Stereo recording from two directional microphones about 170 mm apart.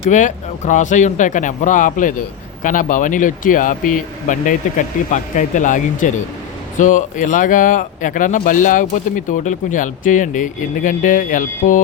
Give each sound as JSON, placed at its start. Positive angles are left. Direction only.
{"t": 0.1, "sound": "speech", "side_deg": 45}